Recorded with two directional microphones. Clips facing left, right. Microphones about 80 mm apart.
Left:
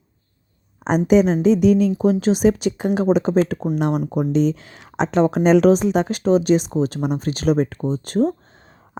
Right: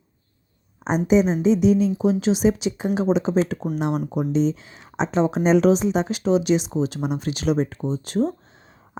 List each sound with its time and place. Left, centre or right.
0.9 s a woman's voice: left